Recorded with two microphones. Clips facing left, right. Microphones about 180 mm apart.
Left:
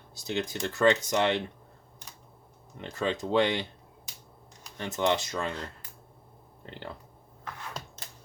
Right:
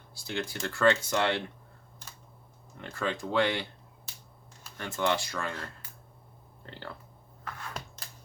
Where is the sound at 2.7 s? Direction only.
20° left (ahead or behind).